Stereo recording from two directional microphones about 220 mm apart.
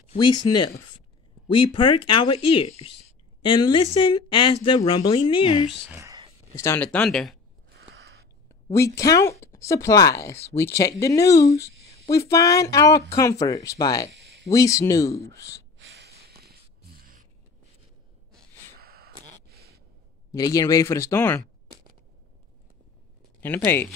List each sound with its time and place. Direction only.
0.1 s speech: 20° left (ahead or behind)
1.5 s speech: 20° left (ahead or behind)
5.9 s a sound: 15° right (ahead or behind)
6.6 s speech: 10° left (ahead or behind)
7.8 s a sound: 50° right (ahead or behind)
8.7 s speech: 15° left (ahead or behind)
15.8 s snort: 50° right (ahead or behind)
18.8 s a sound: 45° right (ahead or behind)
20.2 s speech: 15° left (ahead or behind)
23.4 s speech: 10° left (ahead or behind)